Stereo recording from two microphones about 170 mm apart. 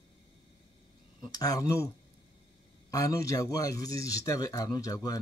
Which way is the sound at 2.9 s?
20° left (ahead or behind).